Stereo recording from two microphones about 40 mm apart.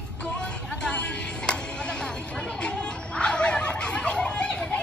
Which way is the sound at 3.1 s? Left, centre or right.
Left.